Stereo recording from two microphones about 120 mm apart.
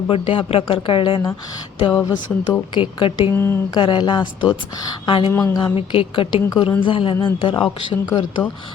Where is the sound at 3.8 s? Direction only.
40° left (ahead or behind).